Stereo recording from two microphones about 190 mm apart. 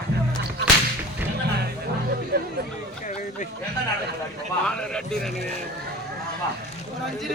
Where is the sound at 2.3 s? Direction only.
55° right (ahead or behind).